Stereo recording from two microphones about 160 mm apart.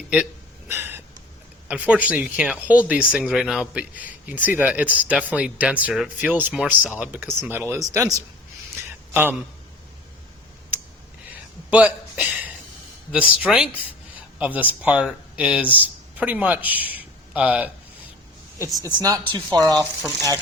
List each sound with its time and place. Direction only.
0.7 s gasp: 15° right (ahead or behind)
1.6 s speech: 10° right (ahead or behind)
8.7 s a sound: 10° right (ahead or behind)
11.7 s a sound: 10° right (ahead or behind)
13.1 s speech: 10° right (ahead or behind)
18.9 s speech: 25° right (ahead or behind)